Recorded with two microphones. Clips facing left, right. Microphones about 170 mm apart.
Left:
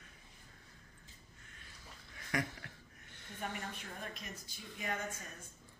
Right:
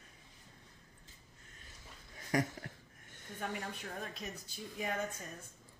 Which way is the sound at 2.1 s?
40° right (ahead or behind).